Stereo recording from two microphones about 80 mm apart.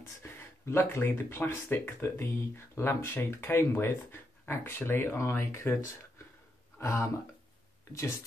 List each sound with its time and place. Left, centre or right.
0.2 s speech: left